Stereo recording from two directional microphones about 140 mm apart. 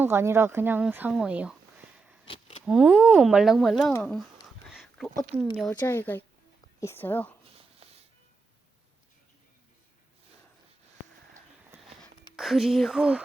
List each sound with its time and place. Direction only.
0.0 s speech: 20° right (ahead or behind)
2.6 s speech: 5° right (ahead or behind)
4.7 s a sound: centre (ahead or behind)
5.3 s speech: 15° right (ahead or behind)
5.8 s a woman's voice: 15° left (ahead or behind)
7.8 s music: 45° right (ahead or behind)
12.4 s speech: centre (ahead or behind)